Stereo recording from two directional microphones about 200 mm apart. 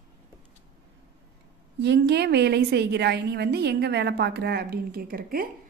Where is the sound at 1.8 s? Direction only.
55° right (ahead or behind).